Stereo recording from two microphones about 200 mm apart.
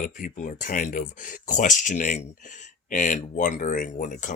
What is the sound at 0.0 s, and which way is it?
Speech, 45° left (ahead or behind).